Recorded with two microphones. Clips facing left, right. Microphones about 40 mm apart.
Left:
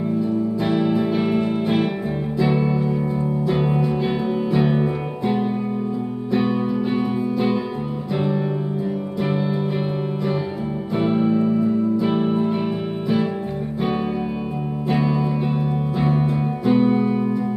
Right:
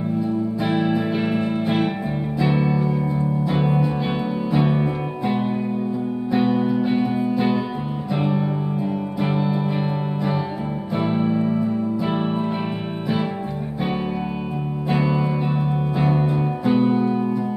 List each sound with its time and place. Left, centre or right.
0.7 s music: centre
6.3 s music: centre
11.2 s music: centre
14.9 s music: centre